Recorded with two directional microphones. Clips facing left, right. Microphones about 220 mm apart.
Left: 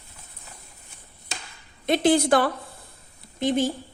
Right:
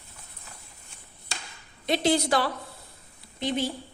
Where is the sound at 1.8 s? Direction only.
50° left (ahead or behind).